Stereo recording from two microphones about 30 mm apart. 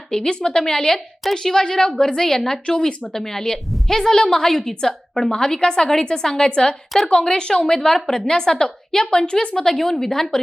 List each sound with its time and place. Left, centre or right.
0.1 s a woman's voice: left
7.5 s a woman's voice: centre
9.2 s a woman's voice: left
9.6 s a woman's voice: centre